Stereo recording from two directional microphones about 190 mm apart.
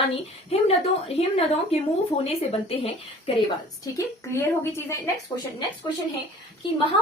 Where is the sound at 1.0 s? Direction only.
30° left (ahead or behind).